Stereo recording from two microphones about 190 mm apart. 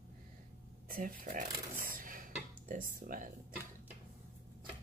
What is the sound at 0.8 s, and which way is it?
Speech, 45° right (ahead or behind).